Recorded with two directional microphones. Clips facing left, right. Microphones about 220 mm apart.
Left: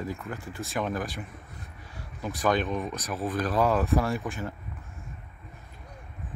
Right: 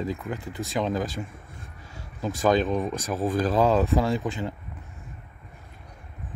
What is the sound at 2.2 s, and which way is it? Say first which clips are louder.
Speech: right 4 dB; 25° right (ahead or behind).